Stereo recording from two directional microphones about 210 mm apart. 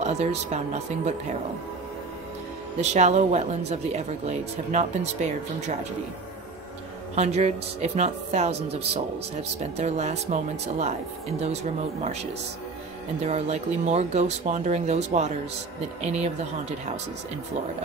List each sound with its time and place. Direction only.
0.0 s speech: 30° right (ahead or behind)
2.8 s speech: 30° right (ahead or behind)
7.2 s speech: 30° right (ahead or behind)